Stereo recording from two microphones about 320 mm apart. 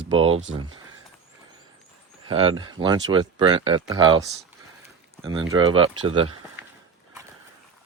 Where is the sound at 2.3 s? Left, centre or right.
Centre.